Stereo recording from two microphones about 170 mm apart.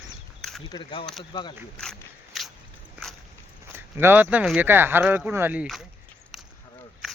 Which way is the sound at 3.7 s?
10° right (ahead or behind).